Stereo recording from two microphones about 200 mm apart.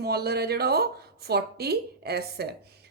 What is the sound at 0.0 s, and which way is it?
Speech, 50° right (ahead or behind).